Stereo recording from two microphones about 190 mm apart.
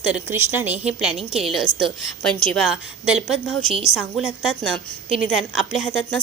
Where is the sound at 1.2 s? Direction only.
30° right (ahead or behind).